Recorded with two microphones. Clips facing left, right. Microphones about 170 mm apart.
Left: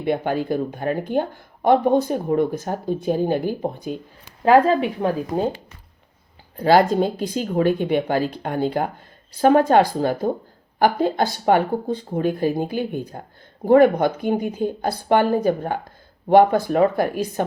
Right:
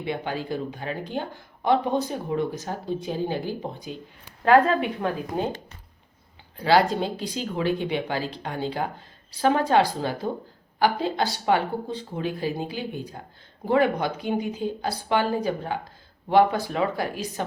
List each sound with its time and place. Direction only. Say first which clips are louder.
0.0 s speech: left 7 dB; 50° left (ahead or behind)
4.4 s speech: left 3 dB; 35° left (ahead or behind)
6.6 s speech: left 5 dB; 45° left (ahead or behind)